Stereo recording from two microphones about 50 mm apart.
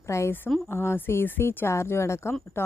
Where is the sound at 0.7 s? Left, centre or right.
Left.